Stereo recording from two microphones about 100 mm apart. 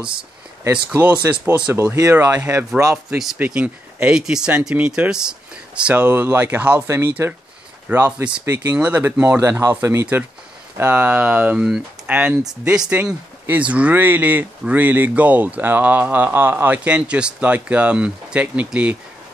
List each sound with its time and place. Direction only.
0.9 s speech: 15° right (ahead or behind)
1.7 s speech: 25° right (ahead or behind)
3.3 s speech: 15° right (ahead or behind)
9.4 s speech: 25° right (ahead or behind)